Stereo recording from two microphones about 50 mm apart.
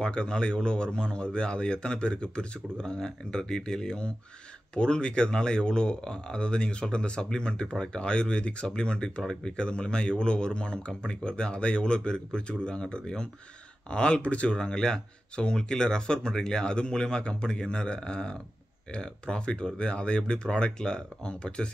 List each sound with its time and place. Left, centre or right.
0.0 s speech: centre